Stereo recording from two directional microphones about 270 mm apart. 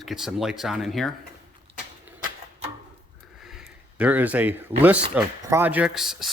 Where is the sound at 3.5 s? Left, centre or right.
Centre.